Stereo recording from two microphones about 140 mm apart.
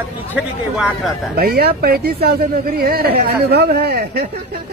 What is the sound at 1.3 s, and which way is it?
Speech, 90° right.